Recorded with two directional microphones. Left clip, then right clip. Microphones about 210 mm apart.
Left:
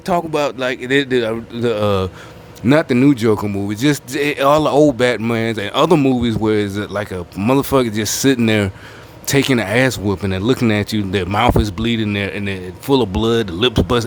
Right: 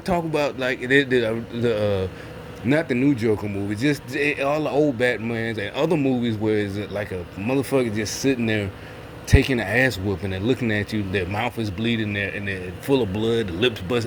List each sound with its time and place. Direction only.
0.0 s a man's voice: 35° left (ahead or behind)